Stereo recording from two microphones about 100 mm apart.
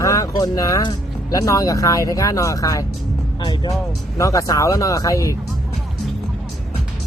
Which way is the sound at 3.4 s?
45° left (ahead or behind).